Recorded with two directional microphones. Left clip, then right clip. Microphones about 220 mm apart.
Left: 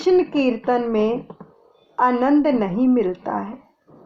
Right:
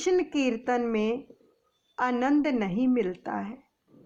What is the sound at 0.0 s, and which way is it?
A woman's voice, 25° right (ahead or behind).